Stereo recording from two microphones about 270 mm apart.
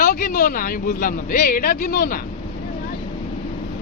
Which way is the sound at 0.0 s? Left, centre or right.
Left.